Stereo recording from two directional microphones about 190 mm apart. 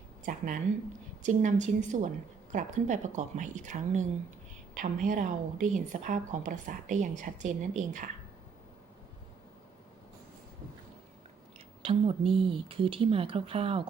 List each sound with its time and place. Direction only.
0.3 s a woman's voice: 45° right (ahead or behind)
11.8 s speech: 30° right (ahead or behind)